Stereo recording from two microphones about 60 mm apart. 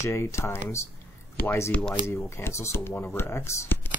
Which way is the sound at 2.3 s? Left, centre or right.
Left.